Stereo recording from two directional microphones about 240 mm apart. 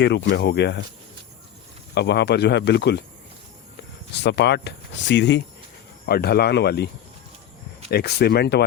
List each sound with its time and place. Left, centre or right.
0.0 s speech: left
2.0 s speech: left
4.2 s speech: left
7.9 s speech: left